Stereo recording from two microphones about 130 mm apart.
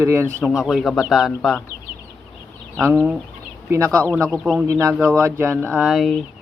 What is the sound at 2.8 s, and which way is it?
Speech, 10° right (ahead or behind).